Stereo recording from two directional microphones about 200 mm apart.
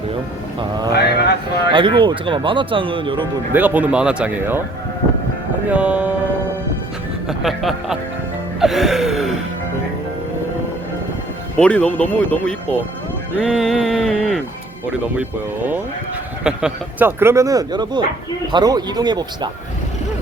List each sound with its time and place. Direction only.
0.9 s a sound: 55° left (ahead or behind)
1.7 s speech: 25° right (ahead or behind)
3.5 s speech: 10° right (ahead or behind)
5.6 s speech: 5° right (ahead or behind)
7.3 s speech: centre (ahead or behind)
8.6 s gasp: centre (ahead or behind)
11.5 s music: 5° left (ahead or behind)
14.8 s speech: 5° right (ahead or behind)